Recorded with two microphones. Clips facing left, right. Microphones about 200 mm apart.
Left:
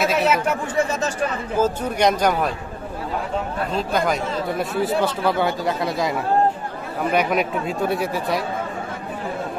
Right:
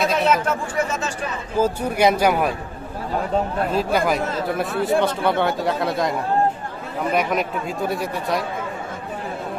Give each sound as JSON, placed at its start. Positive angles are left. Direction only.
{"t": 0.0, "sound": "speech", "side_deg": 5}
{"t": 0.7, "sound": "speech", "side_deg": 35}
{"t": 1.6, "sound": "speech", "side_deg": -10}
{"t": 3.7, "sound": "speech", "side_deg": -5}